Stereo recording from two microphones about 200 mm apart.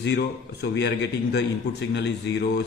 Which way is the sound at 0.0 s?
60° left (ahead or behind).